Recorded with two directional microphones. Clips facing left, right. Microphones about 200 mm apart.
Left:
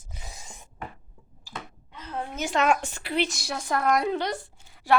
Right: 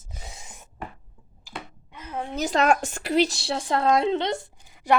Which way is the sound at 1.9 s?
10° right (ahead or behind).